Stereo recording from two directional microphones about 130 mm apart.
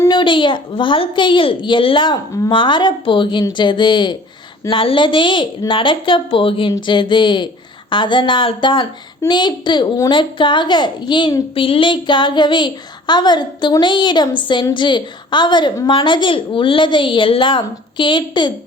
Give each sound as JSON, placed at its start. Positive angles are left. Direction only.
{"t": 0.1, "sound": "a woman's voice", "side_deg": 40}